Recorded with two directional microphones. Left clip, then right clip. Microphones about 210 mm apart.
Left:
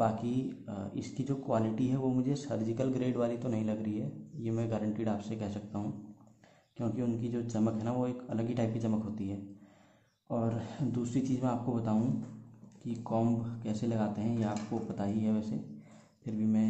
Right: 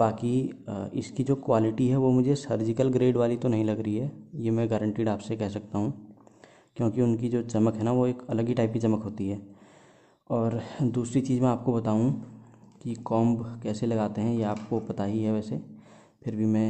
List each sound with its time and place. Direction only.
0.0 s speech: 45° right (ahead or behind)